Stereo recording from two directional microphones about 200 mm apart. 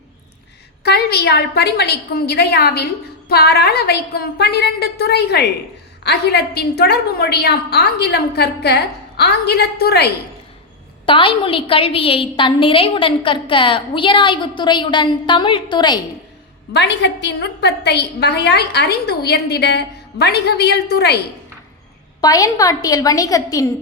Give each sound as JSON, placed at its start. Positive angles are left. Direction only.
{"t": 0.9, "sound": "a woman's voice", "side_deg": 55}
{"t": 11.0, "sound": "a woman's voice", "side_deg": 25}
{"t": 16.7, "sound": "a woman's voice", "side_deg": 55}
{"t": 22.2, "sound": "a woman's voice", "side_deg": 15}